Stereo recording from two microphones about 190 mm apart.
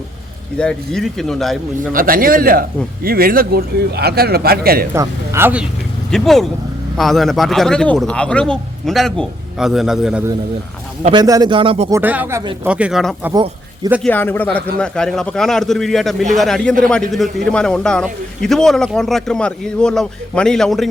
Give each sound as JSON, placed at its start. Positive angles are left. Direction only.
{"t": 0.6, "sound": "a man's voice", "side_deg": 5}
{"t": 1.9, "sound": "speech", "side_deg": -45}
{"t": 4.9, "sound": "speech", "side_deg": -15}
{"t": 6.1, "sound": "a man's voice", "side_deg": 0}
{"t": 11.0, "sound": "speech", "side_deg": -25}
{"t": 11.9, "sound": "a man's voice", "side_deg": -10}
{"t": 13.3, "sound": "a man's voice", "side_deg": -20}
{"t": 14.0, "sound": "a man's voice", "side_deg": 10}